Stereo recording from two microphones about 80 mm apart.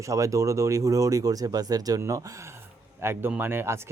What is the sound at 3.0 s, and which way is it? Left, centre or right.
Speech, right.